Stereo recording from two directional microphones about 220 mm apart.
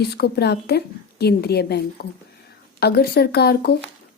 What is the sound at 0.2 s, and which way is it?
Speech, 50° left (ahead or behind).